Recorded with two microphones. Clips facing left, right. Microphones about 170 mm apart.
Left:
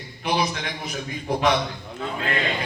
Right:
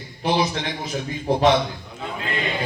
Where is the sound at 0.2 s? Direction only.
25° right (ahead or behind).